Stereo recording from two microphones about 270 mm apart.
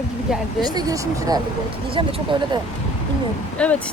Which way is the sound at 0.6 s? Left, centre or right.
Centre.